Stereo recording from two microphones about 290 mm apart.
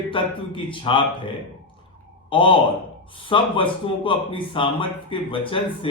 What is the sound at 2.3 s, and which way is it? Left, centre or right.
Speech, centre.